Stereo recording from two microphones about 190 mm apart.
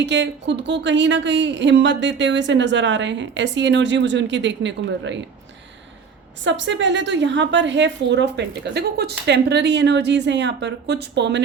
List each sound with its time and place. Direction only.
0.0 s speech: 70° right (ahead or behind)
6.4 s speech: 70° right (ahead or behind)